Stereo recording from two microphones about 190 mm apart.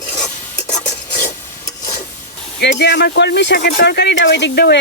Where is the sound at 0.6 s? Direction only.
40° left (ahead or behind).